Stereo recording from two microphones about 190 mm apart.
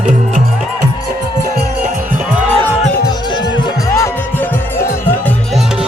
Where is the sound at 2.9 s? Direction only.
25° left (ahead or behind).